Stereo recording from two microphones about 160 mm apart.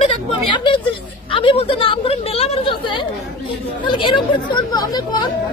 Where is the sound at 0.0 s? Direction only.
30° left (ahead or behind).